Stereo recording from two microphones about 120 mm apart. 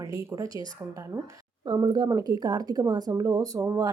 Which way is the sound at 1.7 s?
35° right (ahead or behind).